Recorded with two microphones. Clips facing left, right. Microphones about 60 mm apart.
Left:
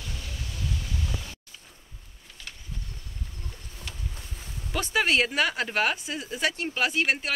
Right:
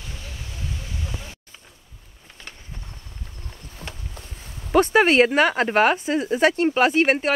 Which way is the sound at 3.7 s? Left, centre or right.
Right.